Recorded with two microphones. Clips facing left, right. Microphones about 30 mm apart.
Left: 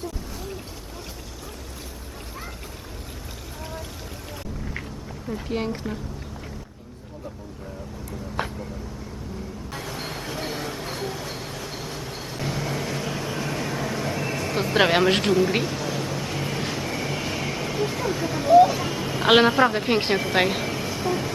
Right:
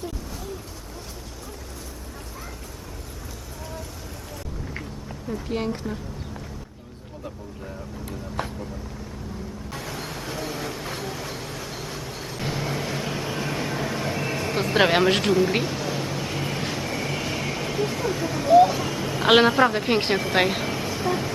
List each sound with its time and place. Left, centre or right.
5.3 s speech: centre
8.4 s speech: left
10.0 s a sound: centre
10.6 s vehicle: centre